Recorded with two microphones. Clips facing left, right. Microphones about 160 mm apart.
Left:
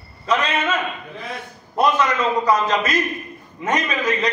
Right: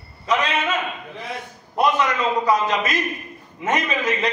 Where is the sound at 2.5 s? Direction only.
20° right (ahead or behind).